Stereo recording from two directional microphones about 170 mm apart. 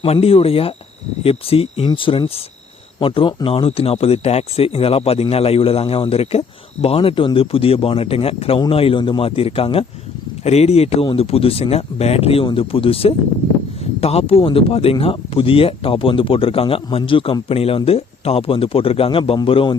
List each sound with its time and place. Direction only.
0.0 s speech: 35° left (ahead or behind)